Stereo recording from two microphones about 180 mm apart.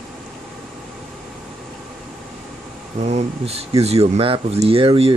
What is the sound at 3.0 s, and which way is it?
Speech, 35° right (ahead or behind).